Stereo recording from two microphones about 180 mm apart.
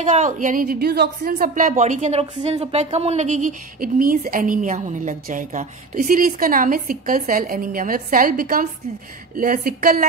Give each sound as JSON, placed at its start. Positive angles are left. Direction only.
{"t": 0.0, "sound": "a woman's voice", "side_deg": -40}